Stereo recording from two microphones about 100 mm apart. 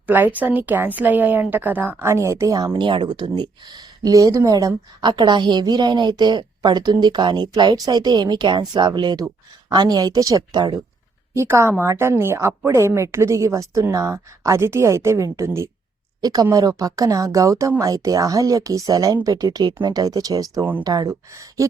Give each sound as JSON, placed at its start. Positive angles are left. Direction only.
{"t": 0.1, "sound": "a woman's voice", "side_deg": -20}
{"t": 11.3, "sound": "a woman's voice", "side_deg": -30}
{"t": 16.2, "sound": "speech", "side_deg": -40}